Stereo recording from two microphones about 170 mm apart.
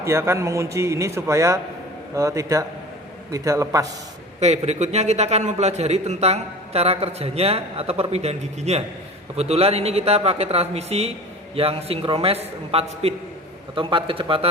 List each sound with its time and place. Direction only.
0.0 s a man's voice: 15° right (ahead or behind)
4.4 s a man's voice: 40° right (ahead or behind)